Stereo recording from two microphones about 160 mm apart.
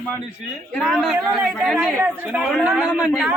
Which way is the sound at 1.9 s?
10° right (ahead or behind).